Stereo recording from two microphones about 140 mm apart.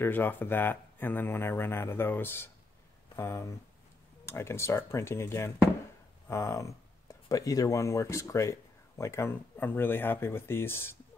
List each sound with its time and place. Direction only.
0.0 s speech: 15° left (ahead or behind)